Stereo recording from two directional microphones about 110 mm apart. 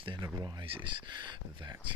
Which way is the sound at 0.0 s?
50° right (ahead or behind).